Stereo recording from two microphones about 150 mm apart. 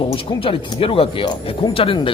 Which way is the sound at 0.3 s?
35° left (ahead or behind).